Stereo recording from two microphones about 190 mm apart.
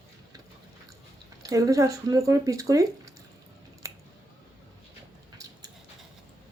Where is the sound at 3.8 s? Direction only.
15° right (ahead or behind).